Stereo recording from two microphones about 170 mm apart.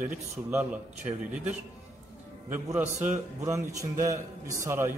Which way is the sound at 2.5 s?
10° right (ahead or behind).